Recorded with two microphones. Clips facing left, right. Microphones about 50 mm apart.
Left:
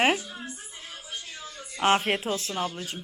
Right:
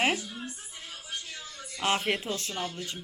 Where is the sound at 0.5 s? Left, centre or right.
Left.